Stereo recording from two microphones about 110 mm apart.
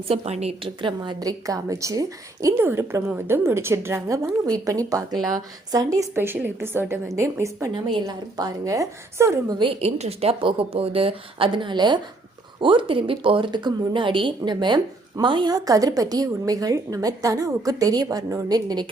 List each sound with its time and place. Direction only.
0.1 s a woman's voice: 75° right (ahead or behind)
0.6 s a woman's voice: 50° right (ahead or behind); by 6.2 s 30° right (ahead or behind)
6.2 s a woman's voice: 20° right (ahead or behind)
7.7 s a woman's voice: 50° right (ahead or behind)
8.0 s a woman's voice: 35° right (ahead or behind)
9.6 s a woman's voice: 50° right (ahead or behind)
10.0 s a woman's voice: 65° right (ahead or behind); by 18.9 s 35° right (ahead or behind)